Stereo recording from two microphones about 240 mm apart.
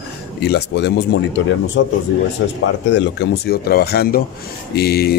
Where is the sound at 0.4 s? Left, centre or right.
Left.